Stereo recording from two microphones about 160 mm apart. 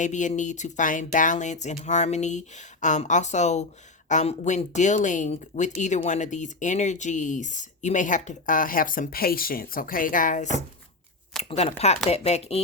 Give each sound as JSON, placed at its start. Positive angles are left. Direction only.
{"t": 0.0, "sound": "speech", "side_deg": 50}
{"t": 11.4, "sound": "speech", "side_deg": 40}